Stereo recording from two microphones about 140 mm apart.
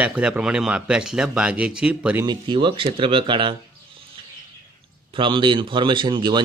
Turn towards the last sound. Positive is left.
turn(degrees=-35)  # may be behind; listen again after turning